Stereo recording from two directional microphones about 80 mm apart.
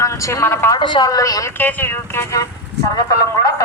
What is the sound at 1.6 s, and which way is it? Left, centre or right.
Speech, left.